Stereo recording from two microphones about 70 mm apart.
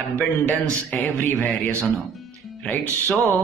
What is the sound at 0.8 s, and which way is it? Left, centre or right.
Speech, left.